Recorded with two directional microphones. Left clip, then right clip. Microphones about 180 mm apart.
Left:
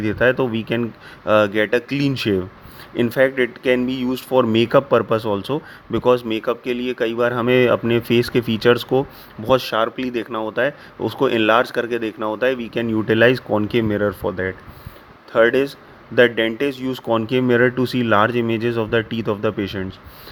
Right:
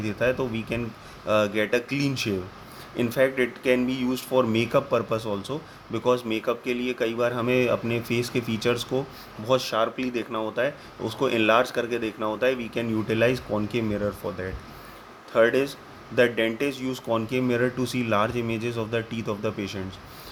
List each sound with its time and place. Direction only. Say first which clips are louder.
0.0 s speech: left 8 dB; 45° left (ahead or behind)